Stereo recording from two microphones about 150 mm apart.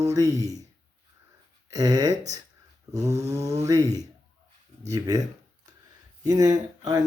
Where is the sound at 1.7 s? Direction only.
25° right (ahead or behind).